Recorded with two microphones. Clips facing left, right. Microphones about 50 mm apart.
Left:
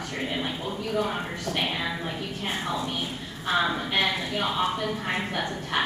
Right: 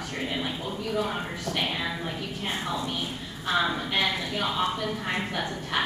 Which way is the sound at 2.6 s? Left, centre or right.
Centre.